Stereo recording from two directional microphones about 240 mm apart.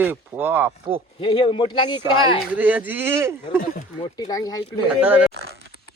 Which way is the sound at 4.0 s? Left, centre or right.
Centre.